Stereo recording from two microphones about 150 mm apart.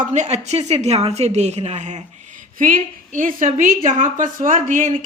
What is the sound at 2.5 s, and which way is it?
A woman's voice, 65° right (ahead or behind).